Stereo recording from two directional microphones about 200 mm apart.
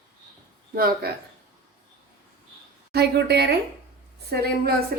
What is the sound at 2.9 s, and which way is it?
A woman's voice, 55° right (ahead or behind).